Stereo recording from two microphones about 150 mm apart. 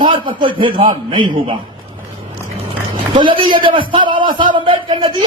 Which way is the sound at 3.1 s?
35° right (ahead or behind).